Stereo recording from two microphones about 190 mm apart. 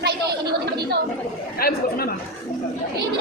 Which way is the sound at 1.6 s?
55° left (ahead or behind).